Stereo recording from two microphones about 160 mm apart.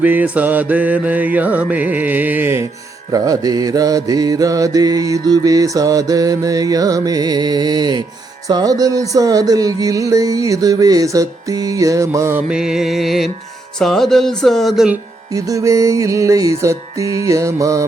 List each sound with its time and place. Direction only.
0.0 s mantra: 10° right (ahead or behind)
12.5 s speech: 5° right (ahead or behind)
15.3 s mantra: 20° right (ahead or behind)